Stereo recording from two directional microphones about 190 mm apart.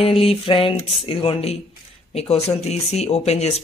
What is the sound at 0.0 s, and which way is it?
Speech, 30° left (ahead or behind).